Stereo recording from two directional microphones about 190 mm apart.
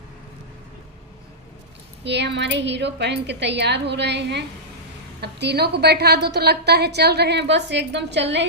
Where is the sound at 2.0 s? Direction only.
65° right (ahead or behind).